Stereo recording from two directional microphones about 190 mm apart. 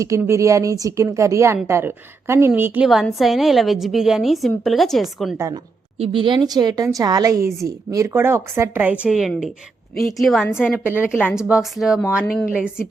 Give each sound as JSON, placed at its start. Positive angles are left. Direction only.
{"t": 0.0, "sound": "a woman's voice", "side_deg": -15}
{"t": 6.0, "sound": "a woman's voice", "side_deg": -25}
{"t": 12.5, "sound": "a woman's voice", "side_deg": -5}